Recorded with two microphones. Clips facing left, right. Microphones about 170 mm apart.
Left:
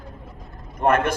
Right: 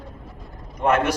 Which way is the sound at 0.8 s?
50° left (ahead or behind).